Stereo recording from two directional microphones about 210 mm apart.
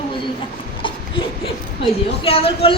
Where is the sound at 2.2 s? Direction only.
25° left (ahead or behind).